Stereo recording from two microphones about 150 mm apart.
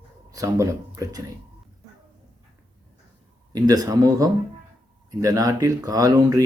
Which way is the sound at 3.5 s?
25° right (ahead or behind).